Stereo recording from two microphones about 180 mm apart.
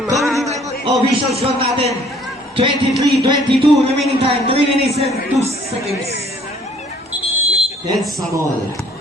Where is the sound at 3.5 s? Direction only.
35° right (ahead or behind).